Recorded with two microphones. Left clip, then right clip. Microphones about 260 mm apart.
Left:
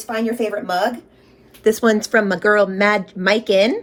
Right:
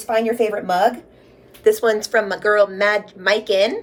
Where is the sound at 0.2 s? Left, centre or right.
Centre.